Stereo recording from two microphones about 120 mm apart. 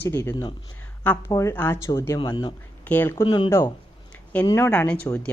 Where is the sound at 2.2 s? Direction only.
40° left (ahead or behind).